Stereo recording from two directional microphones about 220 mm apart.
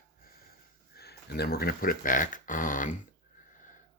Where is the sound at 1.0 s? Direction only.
45° left (ahead or behind).